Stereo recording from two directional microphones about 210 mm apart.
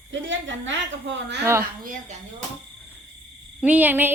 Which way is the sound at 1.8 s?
40° right (ahead or behind).